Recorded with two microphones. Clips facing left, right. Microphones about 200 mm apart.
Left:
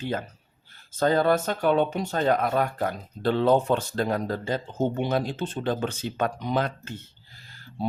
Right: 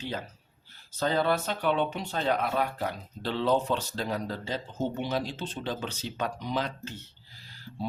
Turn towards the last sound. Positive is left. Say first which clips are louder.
# left 4 dB
turn(degrees=50)  # may be behind; listen again after turning